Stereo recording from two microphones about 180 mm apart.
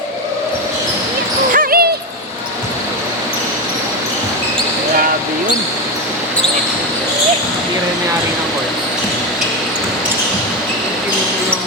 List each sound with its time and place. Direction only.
1.5 s owl: 55° right (ahead or behind)